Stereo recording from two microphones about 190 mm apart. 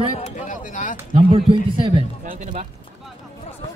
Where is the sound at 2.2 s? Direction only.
40° right (ahead or behind).